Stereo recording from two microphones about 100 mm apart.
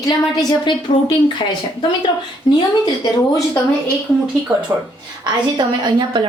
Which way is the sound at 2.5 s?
50° left (ahead or behind).